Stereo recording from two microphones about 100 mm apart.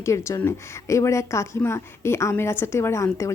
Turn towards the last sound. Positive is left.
turn(degrees=30)  # may be behind; listen again after turning